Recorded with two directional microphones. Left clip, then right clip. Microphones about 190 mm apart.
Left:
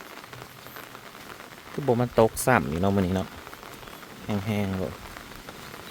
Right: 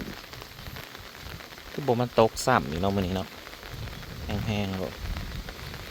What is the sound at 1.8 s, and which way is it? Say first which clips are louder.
Speech: left 1 dB; 10° left (ahead or behind).